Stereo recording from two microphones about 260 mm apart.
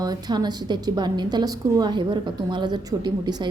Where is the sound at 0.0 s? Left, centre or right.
Centre.